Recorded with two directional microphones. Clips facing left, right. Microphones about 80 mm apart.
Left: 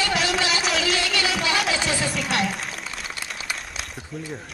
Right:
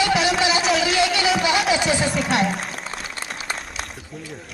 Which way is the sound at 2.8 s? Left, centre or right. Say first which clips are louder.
Right 2 dB; right.